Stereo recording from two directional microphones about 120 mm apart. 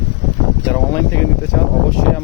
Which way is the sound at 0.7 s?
20° left (ahead or behind).